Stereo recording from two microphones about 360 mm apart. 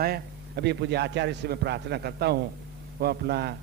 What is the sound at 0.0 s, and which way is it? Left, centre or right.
A man's voice, right.